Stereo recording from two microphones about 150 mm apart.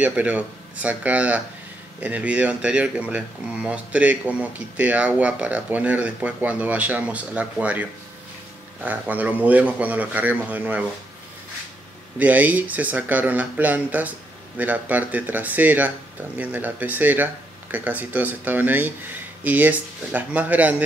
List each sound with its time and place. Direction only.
0.0 s speech: 10° right (ahead or behind)
12.2 s speech: 10° right (ahead or behind)